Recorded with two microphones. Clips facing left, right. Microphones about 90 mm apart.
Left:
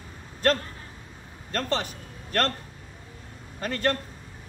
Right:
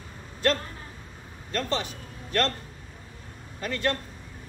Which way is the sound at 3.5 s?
45° left (ahead or behind).